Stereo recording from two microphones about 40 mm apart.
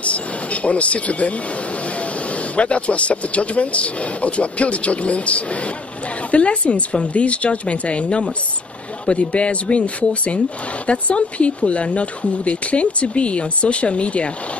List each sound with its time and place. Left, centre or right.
0.0 s speech: left